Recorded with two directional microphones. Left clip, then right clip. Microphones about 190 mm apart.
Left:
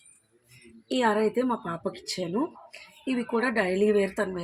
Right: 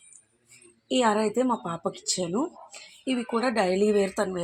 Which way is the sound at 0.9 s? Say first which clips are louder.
Right 1 dB; 30° right (ahead or behind).